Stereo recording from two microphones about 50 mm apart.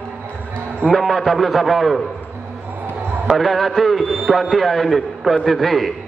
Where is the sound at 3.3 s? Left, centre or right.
Centre.